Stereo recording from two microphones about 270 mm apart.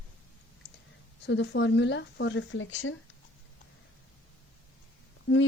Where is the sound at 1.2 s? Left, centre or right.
Left.